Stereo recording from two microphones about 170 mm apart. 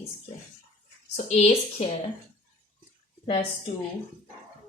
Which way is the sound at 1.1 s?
40° left (ahead or behind).